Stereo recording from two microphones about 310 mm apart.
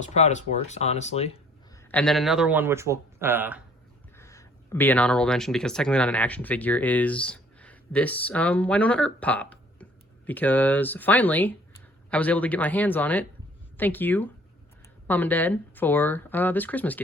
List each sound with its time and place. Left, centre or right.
0.0 s speech: left
1.9 s speech: centre
4.2 s speech: centre